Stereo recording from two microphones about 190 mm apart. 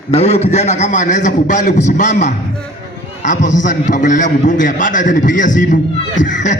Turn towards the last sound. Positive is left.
turn(degrees=40)  # may be behind; listen again after turning